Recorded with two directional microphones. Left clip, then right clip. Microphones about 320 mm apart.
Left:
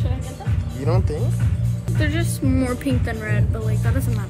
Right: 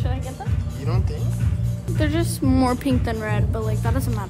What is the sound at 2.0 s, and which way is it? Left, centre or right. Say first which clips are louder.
Speech: right 1 dB; right.